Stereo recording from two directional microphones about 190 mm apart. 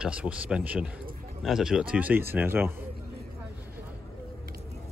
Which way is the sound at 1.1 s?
50° right (ahead or behind).